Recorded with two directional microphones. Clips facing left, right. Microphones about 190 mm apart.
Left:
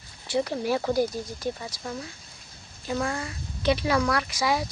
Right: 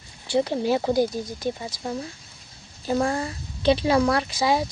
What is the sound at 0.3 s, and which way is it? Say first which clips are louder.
A woman's voice: right 4 dB; 25° right (ahead or behind).